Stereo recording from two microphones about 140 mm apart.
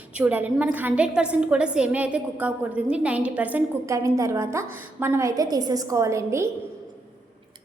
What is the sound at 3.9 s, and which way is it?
A woman's voice, 20° right (ahead or behind).